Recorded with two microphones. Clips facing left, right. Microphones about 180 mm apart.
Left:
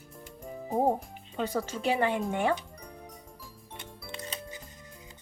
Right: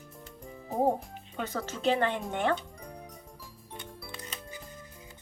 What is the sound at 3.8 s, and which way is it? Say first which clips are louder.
Music: left 1 dB; 20° left (ahead or behind).